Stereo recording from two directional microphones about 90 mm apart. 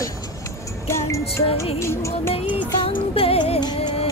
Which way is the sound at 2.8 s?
90° left.